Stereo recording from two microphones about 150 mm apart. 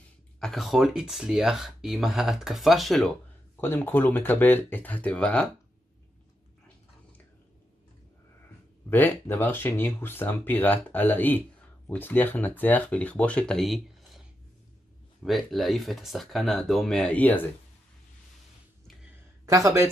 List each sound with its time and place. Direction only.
0.4 s speech: centre (ahead or behind)
3.6 s speech: 15° left (ahead or behind)
8.9 s speech: 15° left (ahead or behind)
15.2 s speech: centre (ahead or behind)
19.4 s speech: 20° right (ahead or behind)